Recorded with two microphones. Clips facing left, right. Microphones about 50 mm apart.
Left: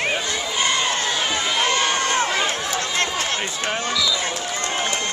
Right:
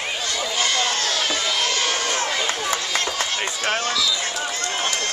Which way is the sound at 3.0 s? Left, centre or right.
Left.